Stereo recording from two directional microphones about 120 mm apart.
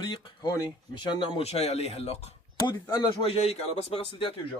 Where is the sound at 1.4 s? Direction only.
60° left (ahead or behind).